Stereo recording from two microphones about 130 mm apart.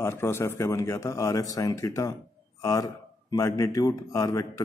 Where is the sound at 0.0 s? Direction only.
20° left (ahead or behind).